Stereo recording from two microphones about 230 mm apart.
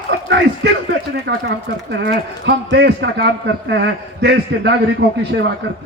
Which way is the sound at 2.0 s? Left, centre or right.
Right.